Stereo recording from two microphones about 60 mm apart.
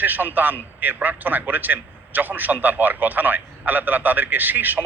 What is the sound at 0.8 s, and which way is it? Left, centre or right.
A man's voice, right.